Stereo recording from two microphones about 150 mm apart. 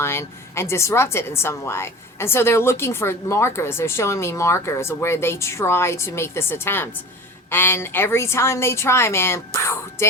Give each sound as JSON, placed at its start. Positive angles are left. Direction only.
{"t": 0.0, "sound": "a woman's voice", "side_deg": 15}